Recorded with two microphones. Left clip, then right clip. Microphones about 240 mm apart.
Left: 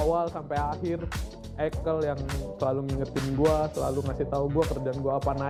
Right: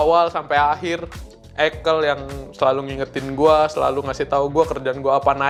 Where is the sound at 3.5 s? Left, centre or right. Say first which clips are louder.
Right 13 dB; centre.